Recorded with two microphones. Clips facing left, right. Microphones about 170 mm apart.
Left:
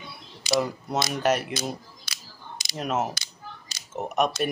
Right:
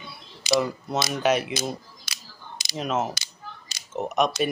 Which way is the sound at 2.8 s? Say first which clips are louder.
Right 1 dB; 10° left (ahead or behind).